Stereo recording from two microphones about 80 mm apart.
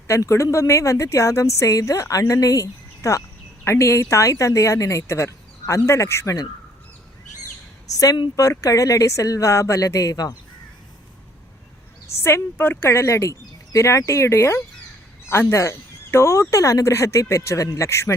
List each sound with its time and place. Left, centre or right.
0.1 s speech: left
7.9 s speech: left
12.0 s speech: left